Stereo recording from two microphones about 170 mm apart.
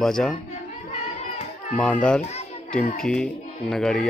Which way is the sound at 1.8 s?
5° left (ahead or behind).